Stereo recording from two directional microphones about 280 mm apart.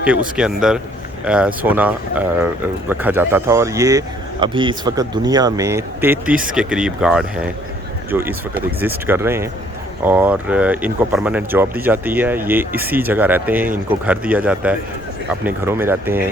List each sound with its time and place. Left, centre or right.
0.0 s speech: centre
6.3 s speech: right
6.6 s speech: centre